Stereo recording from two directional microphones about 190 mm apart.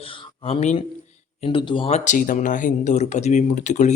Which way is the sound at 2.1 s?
40° left (ahead or behind).